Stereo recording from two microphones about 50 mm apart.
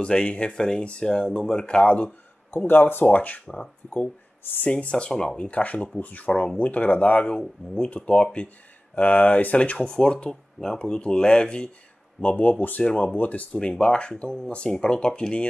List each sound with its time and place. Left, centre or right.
0.0 s speech: left
2.5 s speech: left
3.1 s speech: left
4.6 s speech: left
5.5 s speech: left
7.3 s speech: centre
7.9 s speech: left
8.9 s speech: left
9.6 s speech: centre
12.2 s speech: left
13.6 s speech: centre